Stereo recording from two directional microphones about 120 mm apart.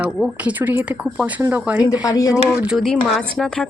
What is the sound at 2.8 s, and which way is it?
Speech, 5° left (ahead or behind).